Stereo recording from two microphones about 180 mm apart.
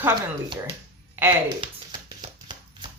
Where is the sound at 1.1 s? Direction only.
15° right (ahead or behind).